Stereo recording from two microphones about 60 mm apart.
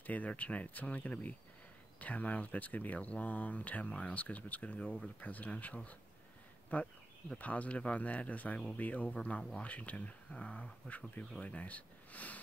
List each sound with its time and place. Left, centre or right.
0.0 s speech: left